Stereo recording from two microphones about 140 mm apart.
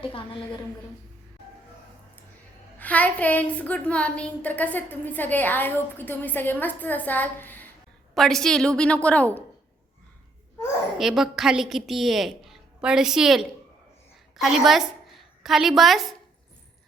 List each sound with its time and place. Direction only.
0.0 s a woman's voice: 35° left (ahead or behind)
2.7 s a woman's voice: 10° left (ahead or behind)
8.1 s a woman's voice: centre (ahead or behind)
10.9 s a woman's voice: centre (ahead or behind)